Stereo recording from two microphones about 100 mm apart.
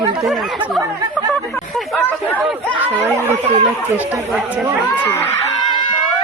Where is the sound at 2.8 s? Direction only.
20° right (ahead or behind).